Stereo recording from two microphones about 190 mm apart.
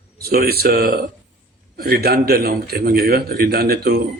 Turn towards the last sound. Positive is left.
turn(degrees=-55)  # may be behind; listen again after turning